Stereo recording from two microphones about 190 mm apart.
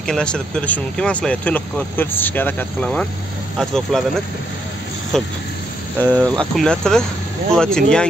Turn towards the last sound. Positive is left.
turn(degrees=5)  # may be behind; listen again after turning